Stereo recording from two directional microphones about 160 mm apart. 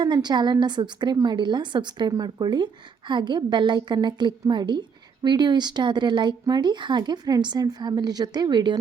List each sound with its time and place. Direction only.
0.0 s speech: 25° right (ahead or behind)